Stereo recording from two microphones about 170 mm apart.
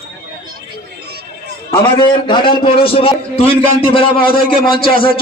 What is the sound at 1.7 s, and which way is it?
A man's voice, 30° left (ahead or behind).